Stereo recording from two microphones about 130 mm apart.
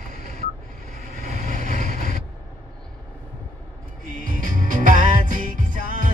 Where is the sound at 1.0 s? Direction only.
75° right (ahead or behind).